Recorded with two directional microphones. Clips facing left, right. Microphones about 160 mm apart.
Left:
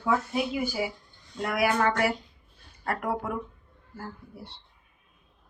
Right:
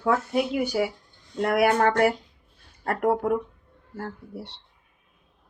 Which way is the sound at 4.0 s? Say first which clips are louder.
Right 6 dB; 75° right (ahead or behind).